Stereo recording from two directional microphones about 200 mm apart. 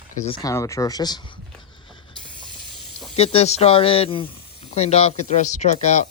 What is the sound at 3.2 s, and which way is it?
Speech, 30° left (ahead or behind).